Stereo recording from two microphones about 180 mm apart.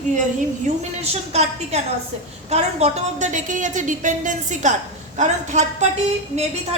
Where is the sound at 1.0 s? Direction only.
35° right (ahead or behind).